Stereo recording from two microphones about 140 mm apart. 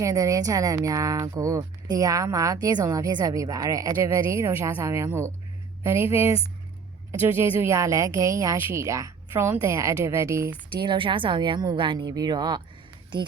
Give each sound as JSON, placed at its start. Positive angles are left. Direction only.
{"t": 0.0, "sound": "speech", "side_deg": -25}
{"t": 10.8, "sound": "speech", "side_deg": -35}